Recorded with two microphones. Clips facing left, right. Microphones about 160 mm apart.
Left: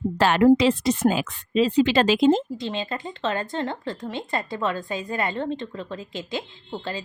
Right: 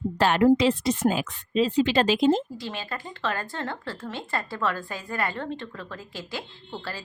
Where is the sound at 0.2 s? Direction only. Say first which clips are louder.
Left 2 dB; 90° left.